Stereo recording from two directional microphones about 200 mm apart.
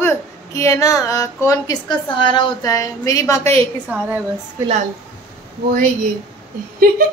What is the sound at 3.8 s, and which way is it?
Speech, 5° right (ahead or behind).